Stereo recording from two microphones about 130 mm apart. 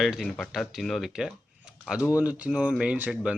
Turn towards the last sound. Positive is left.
turn(degrees=-10)  # may be behind; listen again after turning